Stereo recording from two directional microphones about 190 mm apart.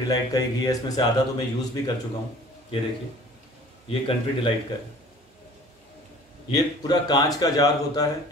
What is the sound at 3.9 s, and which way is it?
Speech, 30° left (ahead or behind).